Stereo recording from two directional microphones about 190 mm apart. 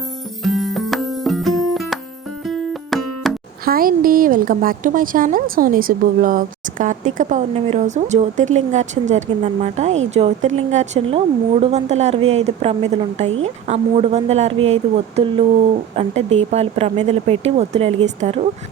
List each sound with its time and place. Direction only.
0.4 s music: centre (ahead or behind)
3.7 s a woman's voice: 50° right (ahead or behind)